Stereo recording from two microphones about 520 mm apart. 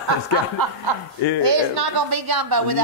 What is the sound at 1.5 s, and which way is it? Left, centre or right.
A woman's voice, right.